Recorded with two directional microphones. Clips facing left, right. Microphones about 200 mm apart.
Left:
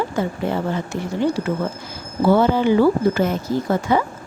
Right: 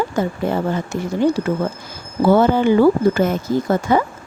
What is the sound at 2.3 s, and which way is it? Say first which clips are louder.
A woman's voice: right 2 dB; 50° right (ahead or behind).